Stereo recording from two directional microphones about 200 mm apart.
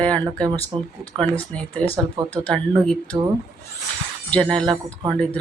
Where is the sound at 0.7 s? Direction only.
25° right (ahead or behind).